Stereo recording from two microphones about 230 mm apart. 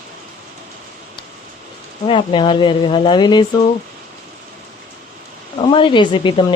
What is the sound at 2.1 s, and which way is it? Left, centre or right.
Speech, left.